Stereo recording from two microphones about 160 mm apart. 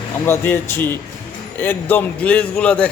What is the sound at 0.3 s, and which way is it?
A man's voice, 15° left (ahead or behind).